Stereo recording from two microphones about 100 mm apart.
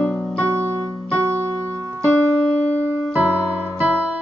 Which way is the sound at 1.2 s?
25° right (ahead or behind).